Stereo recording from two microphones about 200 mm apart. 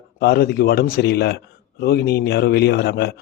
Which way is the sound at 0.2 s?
55° left (ahead or behind).